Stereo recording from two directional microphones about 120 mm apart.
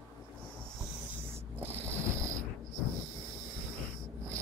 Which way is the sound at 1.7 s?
20° right (ahead or behind).